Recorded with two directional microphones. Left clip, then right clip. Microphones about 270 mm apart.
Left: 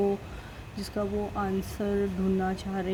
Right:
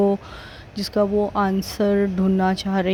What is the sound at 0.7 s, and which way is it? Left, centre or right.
A woman's voice, right.